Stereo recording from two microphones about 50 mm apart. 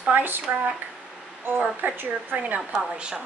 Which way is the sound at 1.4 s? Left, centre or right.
Right.